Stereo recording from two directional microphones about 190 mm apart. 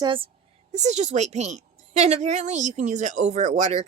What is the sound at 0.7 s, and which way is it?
A woman's voice, 35° right (ahead or behind).